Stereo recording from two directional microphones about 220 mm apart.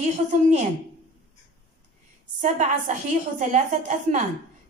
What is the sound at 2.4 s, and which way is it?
A woman's voice, 35° right (ahead or behind).